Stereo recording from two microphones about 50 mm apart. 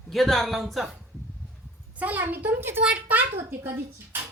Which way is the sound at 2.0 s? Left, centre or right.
Right.